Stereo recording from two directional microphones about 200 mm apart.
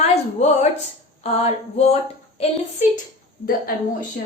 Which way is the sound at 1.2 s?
30° left (ahead or behind).